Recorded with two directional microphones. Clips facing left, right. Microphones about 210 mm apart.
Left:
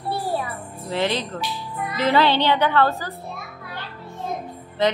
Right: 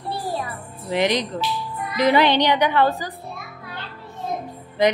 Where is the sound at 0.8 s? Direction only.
15° right (ahead or behind).